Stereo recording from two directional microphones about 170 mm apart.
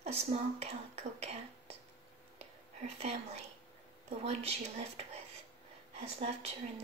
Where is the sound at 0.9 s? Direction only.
40° right (ahead or behind).